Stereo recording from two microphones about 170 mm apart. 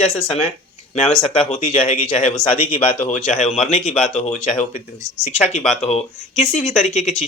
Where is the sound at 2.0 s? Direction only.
40° left (ahead or behind).